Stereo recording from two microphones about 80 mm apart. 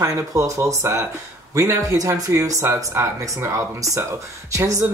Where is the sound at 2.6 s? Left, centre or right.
Right.